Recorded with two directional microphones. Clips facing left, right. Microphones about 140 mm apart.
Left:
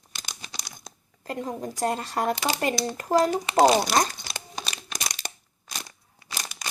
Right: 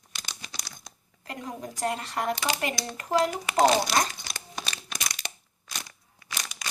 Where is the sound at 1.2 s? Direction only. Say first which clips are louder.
Left 5 dB; 35° left (ahead or behind).